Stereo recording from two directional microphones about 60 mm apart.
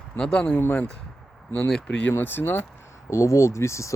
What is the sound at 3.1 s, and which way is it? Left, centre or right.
Speech, left.